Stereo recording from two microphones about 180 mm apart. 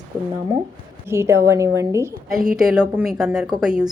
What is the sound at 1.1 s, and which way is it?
A woman's voice, 15° right (ahead or behind).